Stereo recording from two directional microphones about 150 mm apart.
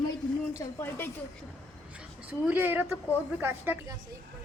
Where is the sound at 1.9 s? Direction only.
10° right (ahead or behind).